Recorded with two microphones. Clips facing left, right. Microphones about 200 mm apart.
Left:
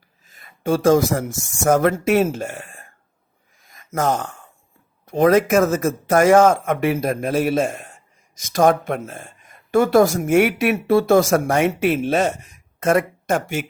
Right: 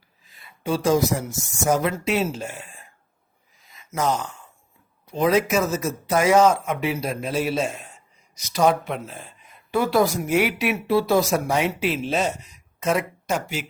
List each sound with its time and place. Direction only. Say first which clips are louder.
0.3 s speech: left 5 dB; 45° left (ahead or behind)
3.6 s a sound: left 3 dB; 50° left (ahead or behind)
5.0 s speech: left 5 dB; 50° left (ahead or behind)